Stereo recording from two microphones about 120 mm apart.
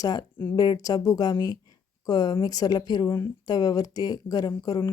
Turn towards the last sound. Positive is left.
turn(degrees=25)  # may be behind; listen again after turning